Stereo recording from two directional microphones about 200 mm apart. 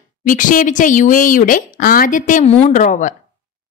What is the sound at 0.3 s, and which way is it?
A woman's voice, 40° left (ahead or behind).